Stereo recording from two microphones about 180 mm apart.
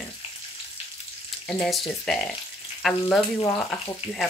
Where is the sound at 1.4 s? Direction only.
5° left (ahead or behind).